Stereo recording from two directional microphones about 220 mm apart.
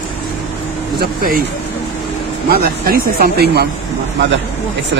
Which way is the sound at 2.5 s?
45° right (ahead or behind).